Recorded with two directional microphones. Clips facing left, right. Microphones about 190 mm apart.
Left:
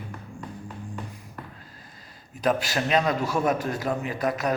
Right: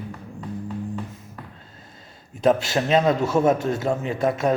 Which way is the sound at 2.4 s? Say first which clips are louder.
Right 5 dB; 25° right (ahead or behind).